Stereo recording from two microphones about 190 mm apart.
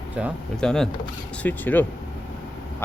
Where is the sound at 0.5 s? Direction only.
5° left (ahead or behind).